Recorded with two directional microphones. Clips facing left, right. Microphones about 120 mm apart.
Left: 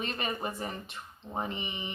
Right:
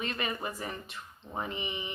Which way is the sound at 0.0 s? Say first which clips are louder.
Left 1 dB; 25° left (ahead or behind).